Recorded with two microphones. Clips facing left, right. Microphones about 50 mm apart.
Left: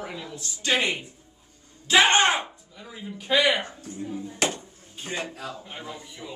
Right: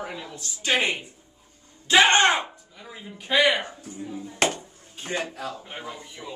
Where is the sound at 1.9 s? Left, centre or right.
Right.